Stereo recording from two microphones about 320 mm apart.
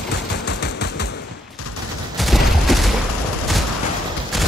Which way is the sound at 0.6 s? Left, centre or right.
Left.